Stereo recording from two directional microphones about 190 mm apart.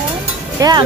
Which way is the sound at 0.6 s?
20° right (ahead or behind).